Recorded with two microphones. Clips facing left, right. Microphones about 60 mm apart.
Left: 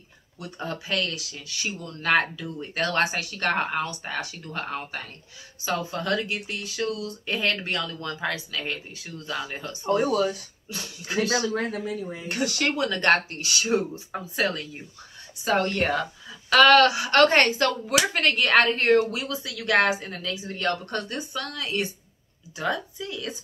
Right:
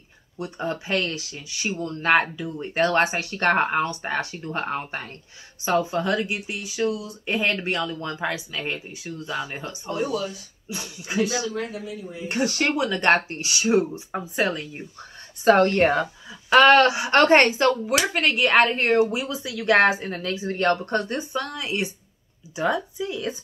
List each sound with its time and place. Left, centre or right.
0.4 s a woman's voice: right
9.9 s speech: left
10.7 s a woman's voice: centre
11.2 s speech: left
12.3 s a woman's voice: right
15.4 s a woman's voice: right
18.1 s a woman's voice: centre